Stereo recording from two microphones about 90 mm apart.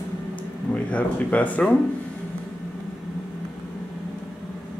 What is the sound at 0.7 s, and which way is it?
Speech, 15° left (ahead or behind).